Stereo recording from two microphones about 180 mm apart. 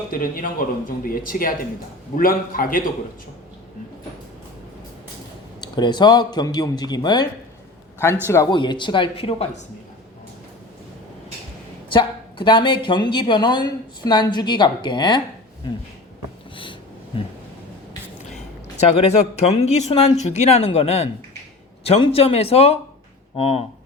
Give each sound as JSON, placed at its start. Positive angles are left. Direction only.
{"t": 0.1, "sound": "speech", "side_deg": 50}
{"t": 5.5, "sound": "a woman's voice", "side_deg": 25}
{"t": 8.5, "sound": "a woman's voice", "side_deg": 25}
{"t": 11.9, "sound": "a woman's voice", "side_deg": 25}
{"t": 19.4, "sound": "speech", "side_deg": 35}